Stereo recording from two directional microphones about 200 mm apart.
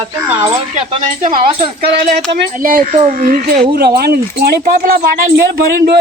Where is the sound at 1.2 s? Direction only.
45° right (ahead or behind).